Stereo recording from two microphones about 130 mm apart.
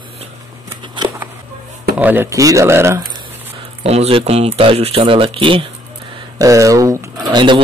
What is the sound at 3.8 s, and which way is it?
A man's voice, 50° right (ahead or behind).